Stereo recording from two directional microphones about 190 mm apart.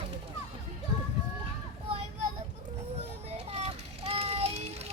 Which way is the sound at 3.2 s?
35° right (ahead or behind).